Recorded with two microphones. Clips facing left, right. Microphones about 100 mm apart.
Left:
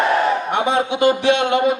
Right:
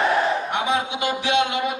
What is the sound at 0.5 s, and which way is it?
Speech, 55° left (ahead or behind).